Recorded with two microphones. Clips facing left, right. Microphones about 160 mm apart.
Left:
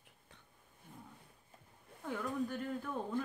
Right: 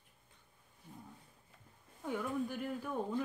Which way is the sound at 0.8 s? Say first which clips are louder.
Right 2 dB; 55° left (ahead or behind).